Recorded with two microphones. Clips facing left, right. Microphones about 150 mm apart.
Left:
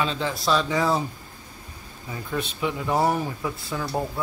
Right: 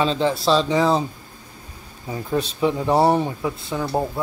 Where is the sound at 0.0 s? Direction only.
30° right (ahead or behind).